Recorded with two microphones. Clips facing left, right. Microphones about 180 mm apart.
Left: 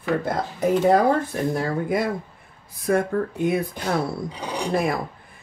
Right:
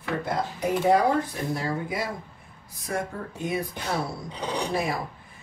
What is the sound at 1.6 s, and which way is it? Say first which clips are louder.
Speech: left 7 dB; 55° left (ahead or behind).